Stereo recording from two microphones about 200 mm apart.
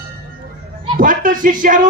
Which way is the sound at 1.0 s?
40° right (ahead or behind).